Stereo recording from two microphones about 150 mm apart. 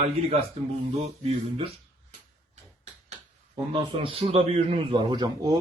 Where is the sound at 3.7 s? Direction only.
40° right (ahead or behind).